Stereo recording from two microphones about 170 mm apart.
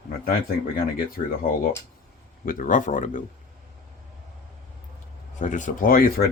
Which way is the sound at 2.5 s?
50° left (ahead or behind).